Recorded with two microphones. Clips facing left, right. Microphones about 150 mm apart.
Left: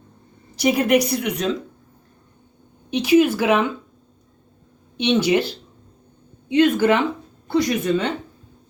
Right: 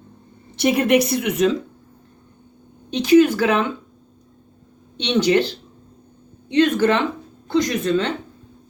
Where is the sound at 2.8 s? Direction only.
10° left (ahead or behind).